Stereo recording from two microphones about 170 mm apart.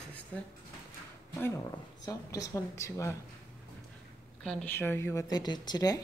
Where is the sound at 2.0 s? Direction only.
20° left (ahead or behind).